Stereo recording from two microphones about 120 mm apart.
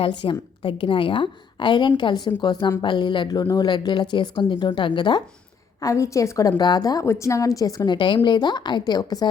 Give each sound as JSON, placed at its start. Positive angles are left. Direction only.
{"t": 0.0, "sound": "a woman's voice", "side_deg": 45}
{"t": 5.8, "sound": "a woman's voice", "side_deg": 25}